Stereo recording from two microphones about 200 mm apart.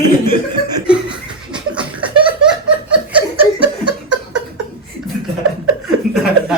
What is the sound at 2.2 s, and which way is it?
Laughter, 25° right (ahead or behind).